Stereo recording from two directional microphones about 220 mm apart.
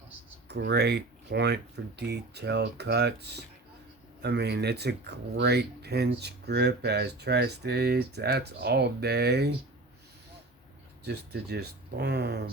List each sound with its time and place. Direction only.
0.4 s speech: 50° right (ahead or behind)
11.0 s speech: 50° right (ahead or behind)